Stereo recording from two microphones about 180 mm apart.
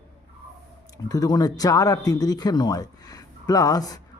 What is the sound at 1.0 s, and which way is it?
A man's voice, 20° left (ahead or behind).